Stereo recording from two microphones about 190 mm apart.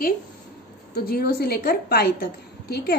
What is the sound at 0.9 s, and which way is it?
A woman's voice, 55° left (ahead or behind).